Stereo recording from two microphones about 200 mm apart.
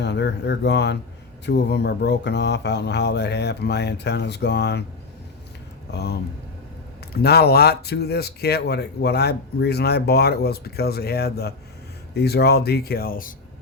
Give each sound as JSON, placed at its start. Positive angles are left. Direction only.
{"t": 0.0, "sound": "speech", "side_deg": 60}
{"t": 5.9, "sound": "speech", "side_deg": 55}